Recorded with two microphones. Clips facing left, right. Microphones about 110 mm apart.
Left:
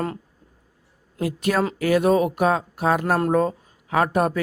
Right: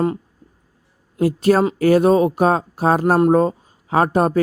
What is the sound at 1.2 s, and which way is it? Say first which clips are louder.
Speech: right 7 dB; 35° right (ahead or behind).